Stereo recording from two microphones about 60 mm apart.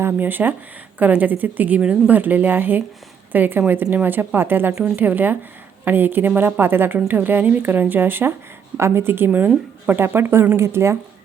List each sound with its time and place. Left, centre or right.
0.0 s a woman's voice: right